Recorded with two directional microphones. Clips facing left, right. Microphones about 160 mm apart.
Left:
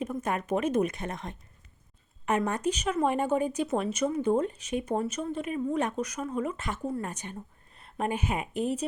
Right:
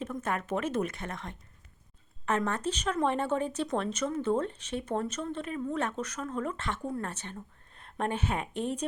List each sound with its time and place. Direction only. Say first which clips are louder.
0.0 s speech: left 3 dB; 15° left (ahead or behind)